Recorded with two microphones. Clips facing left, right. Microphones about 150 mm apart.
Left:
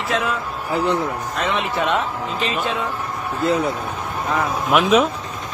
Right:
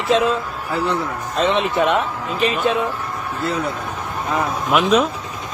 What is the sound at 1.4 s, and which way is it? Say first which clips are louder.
Speech: right 5 dB; 25° right (ahead or behind).